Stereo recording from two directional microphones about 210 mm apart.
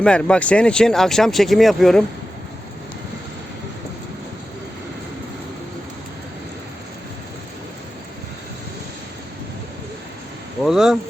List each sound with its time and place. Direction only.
0.0 s speech: 5° left (ahead or behind)
10.6 s speech: centre (ahead or behind)